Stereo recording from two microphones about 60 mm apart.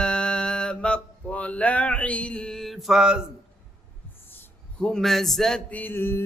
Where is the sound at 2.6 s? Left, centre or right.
Centre.